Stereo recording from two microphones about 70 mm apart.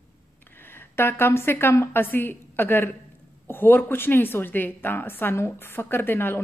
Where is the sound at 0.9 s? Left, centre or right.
Left.